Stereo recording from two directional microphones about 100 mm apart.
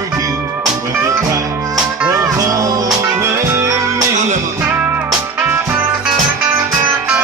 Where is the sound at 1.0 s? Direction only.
30° right (ahead or behind).